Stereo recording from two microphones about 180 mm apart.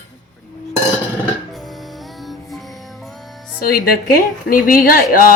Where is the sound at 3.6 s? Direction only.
55° left (ahead or behind).